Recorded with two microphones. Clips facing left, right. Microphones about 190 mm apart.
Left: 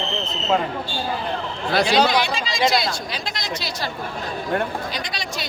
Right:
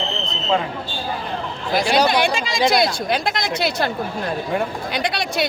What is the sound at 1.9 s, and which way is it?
Speech, 55° right (ahead or behind).